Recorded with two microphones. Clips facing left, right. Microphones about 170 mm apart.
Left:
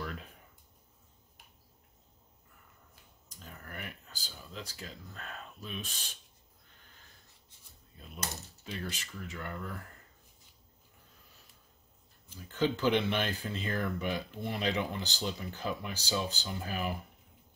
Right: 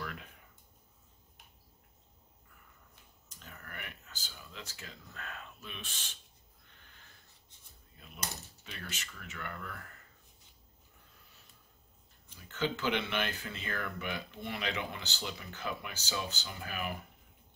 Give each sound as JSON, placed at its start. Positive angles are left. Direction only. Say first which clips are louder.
{"t": 3.4, "sound": "a sound", "louder": "left 3 dB", "side_deg": 35}
{"t": 8.6, "sound": "speech", "louder": "left 7 dB", "side_deg": 35}
{"t": 12.4, "sound": "speech", "louder": "left 5 dB", "side_deg": 35}